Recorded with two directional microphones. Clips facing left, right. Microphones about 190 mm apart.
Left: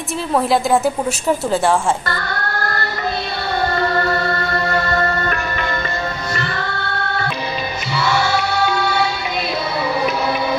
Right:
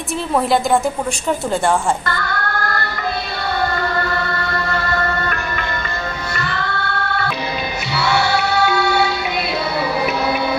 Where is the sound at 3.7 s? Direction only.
35° left (ahead or behind).